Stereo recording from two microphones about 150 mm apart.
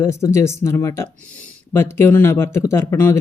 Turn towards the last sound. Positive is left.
turn(degrees=15)  # may be behind; listen again after turning